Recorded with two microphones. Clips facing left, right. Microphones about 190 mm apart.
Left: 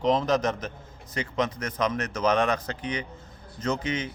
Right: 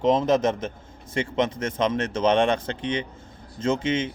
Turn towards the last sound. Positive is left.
turn(degrees=-25)  # may be behind; listen again after turning